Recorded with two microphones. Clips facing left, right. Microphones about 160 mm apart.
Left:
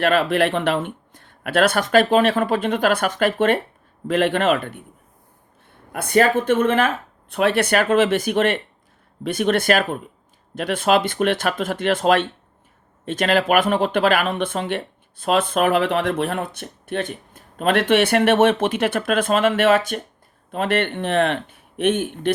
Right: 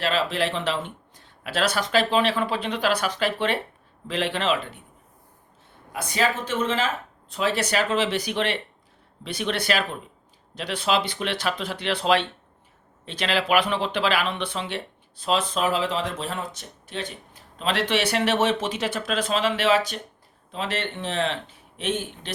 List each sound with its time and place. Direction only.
0.0 s speech: 55° left (ahead or behind)
5.9 s speech: 55° left (ahead or behind)